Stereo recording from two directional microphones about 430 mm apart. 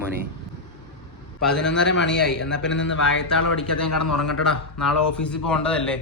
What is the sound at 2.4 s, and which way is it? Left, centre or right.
Speech, left.